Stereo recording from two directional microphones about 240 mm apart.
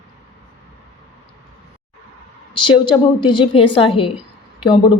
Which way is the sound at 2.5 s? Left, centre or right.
Centre.